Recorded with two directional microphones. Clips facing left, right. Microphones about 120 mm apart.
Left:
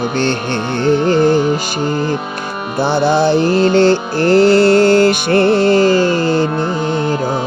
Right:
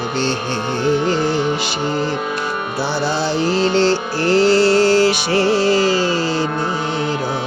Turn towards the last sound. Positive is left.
turn(degrees=50)  # may be behind; listen again after turning